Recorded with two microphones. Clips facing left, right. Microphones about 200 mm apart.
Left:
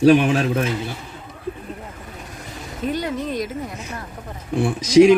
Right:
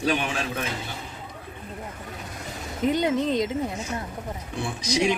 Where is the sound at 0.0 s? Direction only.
40° left (ahead or behind).